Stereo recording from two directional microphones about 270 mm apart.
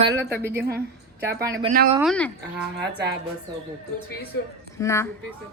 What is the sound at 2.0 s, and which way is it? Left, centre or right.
Speech, centre.